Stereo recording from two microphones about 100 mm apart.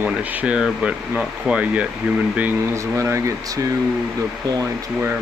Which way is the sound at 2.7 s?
30° right (ahead or behind).